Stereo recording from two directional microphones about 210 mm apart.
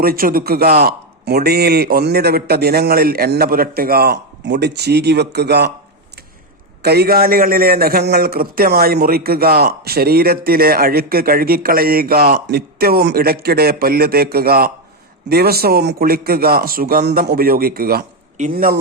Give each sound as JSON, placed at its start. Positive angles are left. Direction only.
{"t": 0.0, "sound": "a man's voice", "side_deg": -45}
{"t": 6.8, "sound": "a man's voice", "side_deg": -50}